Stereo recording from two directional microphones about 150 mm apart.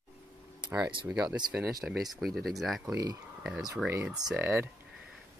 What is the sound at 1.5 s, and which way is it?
Speech, 20° right (ahead or behind).